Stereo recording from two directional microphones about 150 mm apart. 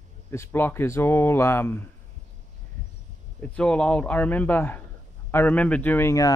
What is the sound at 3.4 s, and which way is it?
Speech, 5° left (ahead or behind).